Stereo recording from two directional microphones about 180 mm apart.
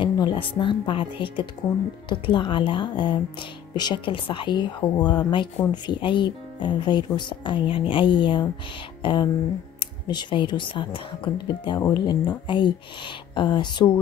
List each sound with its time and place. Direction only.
0.0 s speech: 25° left (ahead or behind)